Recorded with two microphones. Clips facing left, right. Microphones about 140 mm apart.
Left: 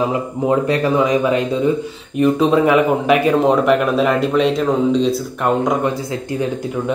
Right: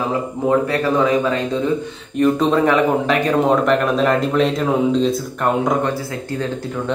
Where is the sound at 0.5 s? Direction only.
20° left (ahead or behind); by 5.8 s centre (ahead or behind).